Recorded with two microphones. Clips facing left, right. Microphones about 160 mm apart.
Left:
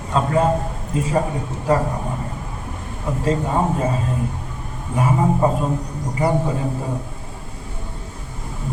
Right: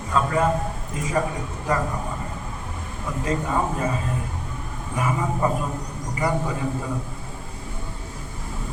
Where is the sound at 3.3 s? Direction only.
30° left (ahead or behind).